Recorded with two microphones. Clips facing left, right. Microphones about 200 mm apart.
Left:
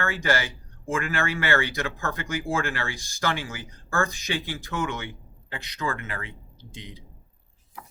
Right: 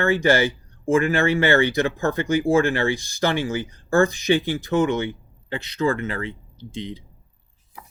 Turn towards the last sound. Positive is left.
turn(degrees=-25)  # may be behind; listen again after turning